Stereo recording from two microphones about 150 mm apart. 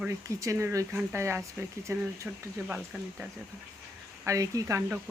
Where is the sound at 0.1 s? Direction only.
20° right (ahead or behind).